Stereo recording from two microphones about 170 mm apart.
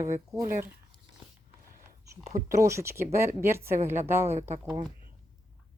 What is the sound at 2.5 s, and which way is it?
Speech, 15° right (ahead or behind).